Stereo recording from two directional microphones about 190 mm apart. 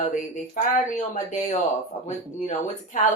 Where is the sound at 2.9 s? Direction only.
40° left (ahead or behind).